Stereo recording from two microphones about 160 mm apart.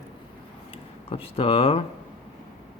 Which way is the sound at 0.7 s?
35° left (ahead or behind).